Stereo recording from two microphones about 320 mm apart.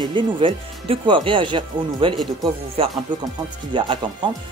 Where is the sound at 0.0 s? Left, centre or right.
Centre.